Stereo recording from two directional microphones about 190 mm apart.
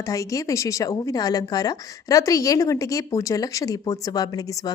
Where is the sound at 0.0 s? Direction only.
15° left (ahead or behind).